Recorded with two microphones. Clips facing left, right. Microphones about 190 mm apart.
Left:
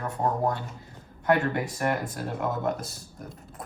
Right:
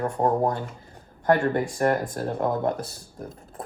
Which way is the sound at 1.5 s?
40° right (ahead or behind).